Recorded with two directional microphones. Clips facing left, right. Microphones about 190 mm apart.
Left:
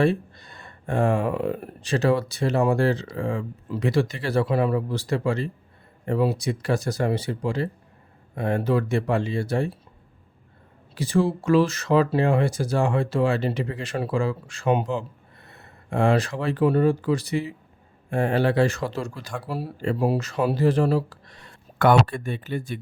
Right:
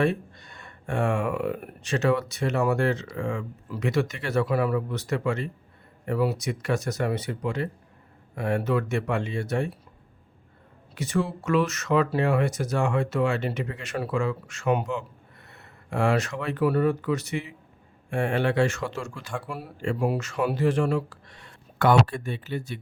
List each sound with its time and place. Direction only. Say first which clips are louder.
0.0 s speech: left 3 dB; 35° left (ahead or behind)
10.9 s speech: left 5 dB; 30° left (ahead or behind)
21.8 s speech: left 2 dB; 55° left (ahead or behind)